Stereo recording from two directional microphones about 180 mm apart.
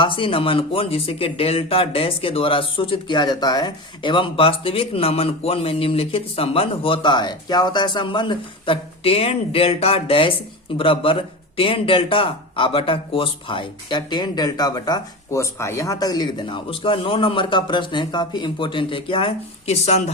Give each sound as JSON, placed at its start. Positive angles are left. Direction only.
{"t": 0.0, "sound": "speech", "side_deg": 30}